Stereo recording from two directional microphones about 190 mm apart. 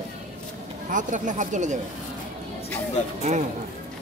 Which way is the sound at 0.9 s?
40° right (ahead or behind).